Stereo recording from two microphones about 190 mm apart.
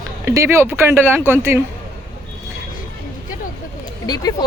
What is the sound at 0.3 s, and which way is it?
Speech, 15° right (ahead or behind).